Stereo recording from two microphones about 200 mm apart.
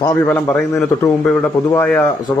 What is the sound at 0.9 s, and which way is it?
A man's voice, 15° left (ahead or behind).